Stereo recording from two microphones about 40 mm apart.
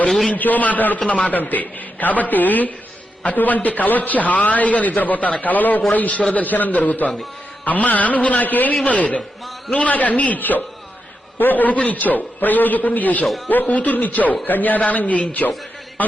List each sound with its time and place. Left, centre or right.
0.3 s a man's voice: left
0.9 s a man's voice: left
1.3 s a man's voice: left